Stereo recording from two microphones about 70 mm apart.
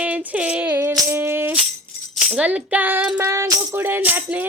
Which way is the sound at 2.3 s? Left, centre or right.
Centre.